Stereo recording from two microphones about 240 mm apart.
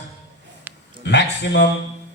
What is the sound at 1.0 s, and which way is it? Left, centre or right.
Speech, left.